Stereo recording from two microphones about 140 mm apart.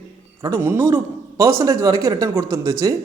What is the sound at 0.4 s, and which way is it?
A man's voice, 20° right (ahead or behind).